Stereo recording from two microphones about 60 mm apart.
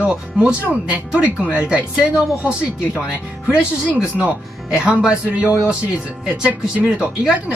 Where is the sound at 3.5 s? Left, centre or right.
Centre.